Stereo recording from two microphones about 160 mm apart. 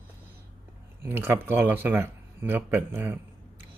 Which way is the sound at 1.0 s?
15° right (ahead or behind).